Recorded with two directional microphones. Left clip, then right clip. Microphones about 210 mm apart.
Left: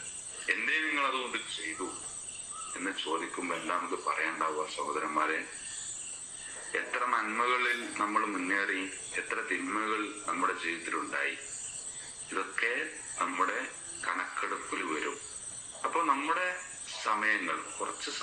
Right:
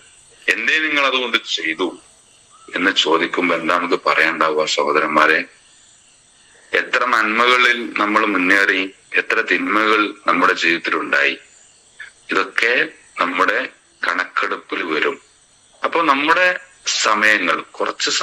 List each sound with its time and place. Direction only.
0.4 s a man's voice: 50° right (ahead or behind)
2.7 s a man's voice: 50° right (ahead or behind)
6.7 s a man's voice: 50° right (ahead or behind)